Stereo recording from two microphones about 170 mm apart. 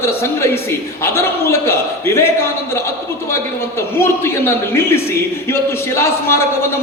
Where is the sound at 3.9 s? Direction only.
15° left (ahead or behind).